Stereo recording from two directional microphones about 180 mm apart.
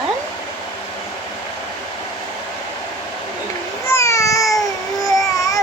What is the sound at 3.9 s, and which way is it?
Baby cry, 15° left (ahead or behind).